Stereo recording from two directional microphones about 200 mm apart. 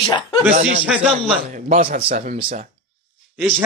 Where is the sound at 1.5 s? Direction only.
35° right (ahead or behind).